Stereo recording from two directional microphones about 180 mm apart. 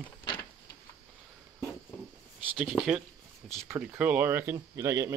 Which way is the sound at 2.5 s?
5° right (ahead or behind).